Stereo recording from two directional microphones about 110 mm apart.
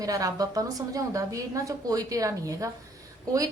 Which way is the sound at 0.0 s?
30° right (ahead or behind).